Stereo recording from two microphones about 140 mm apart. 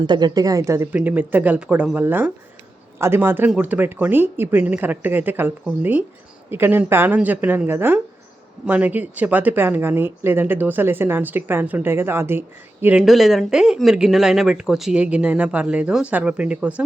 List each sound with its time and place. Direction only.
0.0 s speech: 30° right (ahead or behind); by 13.0 s 15° right (ahead or behind)
13.0 s speech: centre (ahead or behind)